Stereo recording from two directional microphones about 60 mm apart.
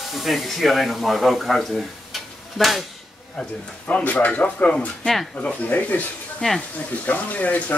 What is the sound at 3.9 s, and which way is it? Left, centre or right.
Speech, left.